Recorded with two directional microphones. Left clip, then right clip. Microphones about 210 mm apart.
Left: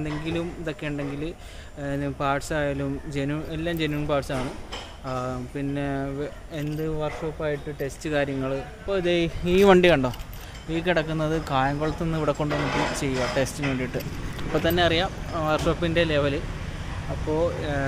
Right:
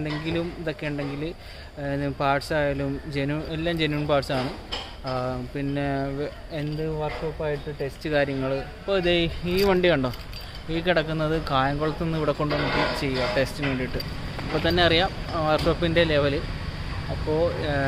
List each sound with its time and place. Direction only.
0.0 s speech: 5° right (ahead or behind)
7.0 s speech: 5° left (ahead or behind)
9.0 s speech: 5° left (ahead or behind)
9.5 s speech: 45° left (ahead or behind)
9.8 s speech: 25° left (ahead or behind)
10.7 s speech: 5° left (ahead or behind)
14.8 s speech: 10° right (ahead or behind)